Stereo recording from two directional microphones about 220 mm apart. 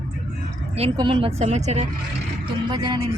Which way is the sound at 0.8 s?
20° right (ahead or behind).